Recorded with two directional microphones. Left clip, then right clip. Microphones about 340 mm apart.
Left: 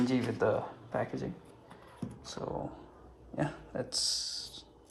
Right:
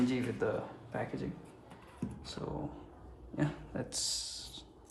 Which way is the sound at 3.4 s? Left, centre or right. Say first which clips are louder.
Left 2 dB; centre.